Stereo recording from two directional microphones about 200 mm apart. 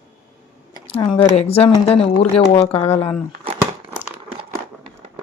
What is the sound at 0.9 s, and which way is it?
Speech, 25° left (ahead or behind).